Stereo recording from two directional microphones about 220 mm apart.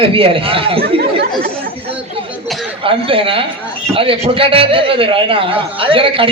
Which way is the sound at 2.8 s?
25° right (ahead or behind).